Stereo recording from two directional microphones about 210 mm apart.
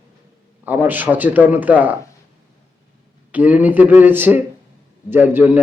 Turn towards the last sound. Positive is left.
turn(degrees=-10)  # may be behind; listen again after turning